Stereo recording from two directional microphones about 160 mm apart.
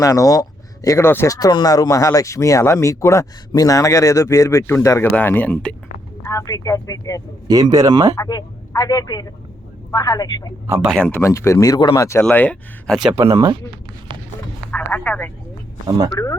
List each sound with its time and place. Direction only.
0.0 s speech: 20° left (ahead or behind)
6.2 s speech: 20° left (ahead or behind)
7.4 s speech: 25° right (ahead or behind)
8.1 s speech: 25° left (ahead or behind)
10.8 s speech: 5° left (ahead or behind)
11.2 s speech: 20° left (ahead or behind)
13.1 s speech: 20° right (ahead or behind)
14.7 s telephone: 10° left (ahead or behind)
16.2 s speech: 20° left (ahead or behind)